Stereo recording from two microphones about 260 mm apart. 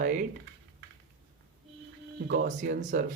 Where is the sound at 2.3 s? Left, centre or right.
Right.